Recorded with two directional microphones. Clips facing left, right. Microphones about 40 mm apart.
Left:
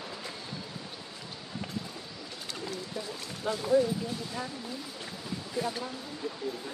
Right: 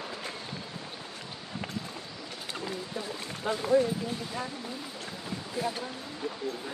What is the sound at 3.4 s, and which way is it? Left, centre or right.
Speech, right.